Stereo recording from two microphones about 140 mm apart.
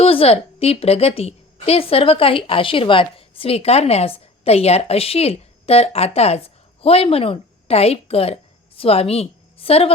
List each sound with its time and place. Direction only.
0.0 s a woman's voice: 45° left (ahead or behind)